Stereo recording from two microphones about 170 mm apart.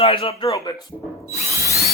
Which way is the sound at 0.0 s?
35° left (ahead or behind).